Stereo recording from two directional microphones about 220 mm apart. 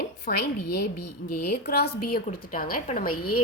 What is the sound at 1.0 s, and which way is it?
Speech, 90° left.